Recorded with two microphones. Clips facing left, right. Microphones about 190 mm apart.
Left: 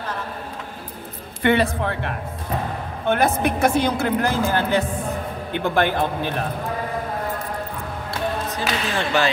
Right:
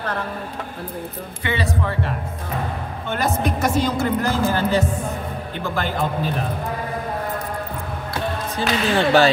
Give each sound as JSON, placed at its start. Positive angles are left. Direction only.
{"t": 1.4, "sound": "a man's voice", "side_deg": 55}
{"t": 8.5, "sound": "speech", "side_deg": -35}